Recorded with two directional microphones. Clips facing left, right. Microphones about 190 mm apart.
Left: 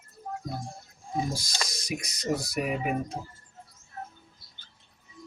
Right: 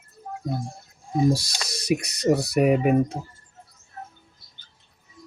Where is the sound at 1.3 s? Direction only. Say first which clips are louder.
Right 5 dB; 65° right (ahead or behind).